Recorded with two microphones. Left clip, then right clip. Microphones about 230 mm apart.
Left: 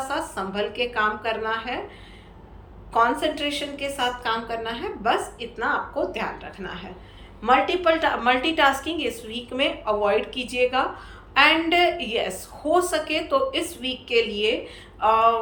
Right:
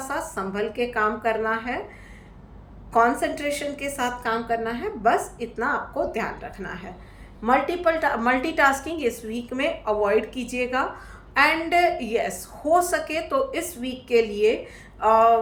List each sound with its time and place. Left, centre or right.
0.1 s a woman's voice: centre
2.9 s a woman's voice: centre